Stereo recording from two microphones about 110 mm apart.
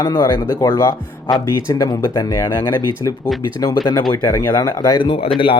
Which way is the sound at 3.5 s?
40° left (ahead or behind).